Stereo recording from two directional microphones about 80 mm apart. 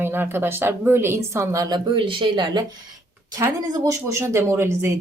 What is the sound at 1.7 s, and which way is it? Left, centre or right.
Speech, right.